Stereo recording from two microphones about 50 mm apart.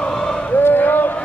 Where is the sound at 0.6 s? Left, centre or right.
Left.